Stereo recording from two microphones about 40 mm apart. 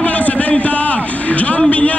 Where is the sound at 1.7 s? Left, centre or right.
Left.